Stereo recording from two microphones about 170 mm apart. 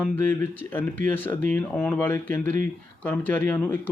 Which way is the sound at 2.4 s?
50° right (ahead or behind).